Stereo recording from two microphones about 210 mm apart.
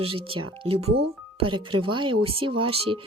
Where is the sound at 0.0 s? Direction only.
25° right (ahead or behind).